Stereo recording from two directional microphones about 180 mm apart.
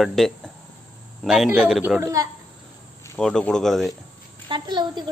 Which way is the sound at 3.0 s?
5° left (ahead or behind).